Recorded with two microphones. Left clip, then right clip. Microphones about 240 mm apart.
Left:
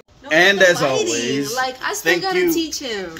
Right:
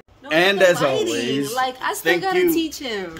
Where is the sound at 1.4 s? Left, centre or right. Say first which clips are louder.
Even; centre.